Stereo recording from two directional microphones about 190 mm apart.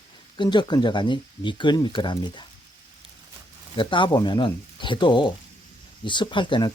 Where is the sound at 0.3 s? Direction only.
25° left (ahead or behind).